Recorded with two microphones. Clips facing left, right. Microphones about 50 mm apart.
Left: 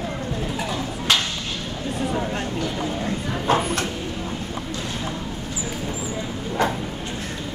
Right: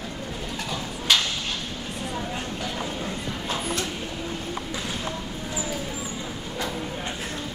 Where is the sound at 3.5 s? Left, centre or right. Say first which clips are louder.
Left 8 dB; left.